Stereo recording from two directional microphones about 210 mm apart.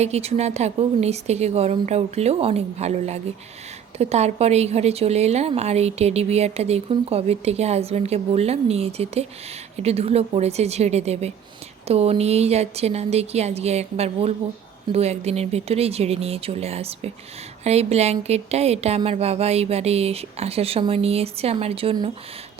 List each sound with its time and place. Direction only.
0.0 s a woman's voice: 30° right (ahead or behind)